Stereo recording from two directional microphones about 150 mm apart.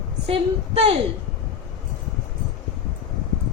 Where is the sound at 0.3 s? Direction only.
40° right (ahead or behind).